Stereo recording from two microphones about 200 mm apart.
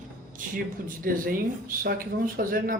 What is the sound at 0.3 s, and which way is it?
Speech, 45° right (ahead or behind).